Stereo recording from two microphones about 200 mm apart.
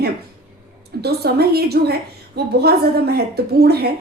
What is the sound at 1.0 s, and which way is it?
A woman's voice, 50° right (ahead or behind).